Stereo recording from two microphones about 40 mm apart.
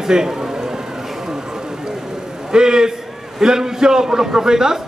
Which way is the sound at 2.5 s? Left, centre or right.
Centre.